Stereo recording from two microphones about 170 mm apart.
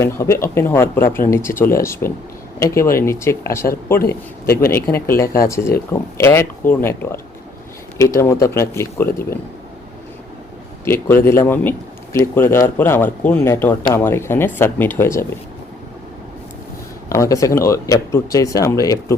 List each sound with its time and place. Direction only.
0.0 s speech: 15° left (ahead or behind)
11.2 s speech: 15° left (ahead or behind)
17.1 s speech: 20° left (ahead or behind)